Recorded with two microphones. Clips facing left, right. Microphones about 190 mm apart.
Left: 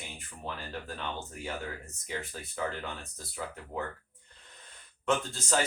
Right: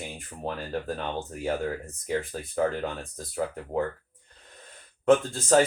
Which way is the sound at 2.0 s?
45° right (ahead or behind).